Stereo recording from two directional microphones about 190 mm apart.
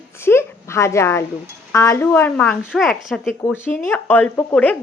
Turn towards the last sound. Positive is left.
turn(degrees=10)  # may be behind; listen again after turning